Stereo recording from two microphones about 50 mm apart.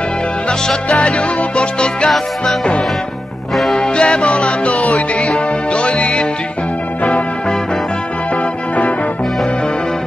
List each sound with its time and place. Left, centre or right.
0.5 s music: centre
2.0 s music: centre
3.7 s music: centre